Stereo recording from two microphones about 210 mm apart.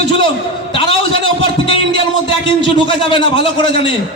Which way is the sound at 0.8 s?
25° left (ahead or behind).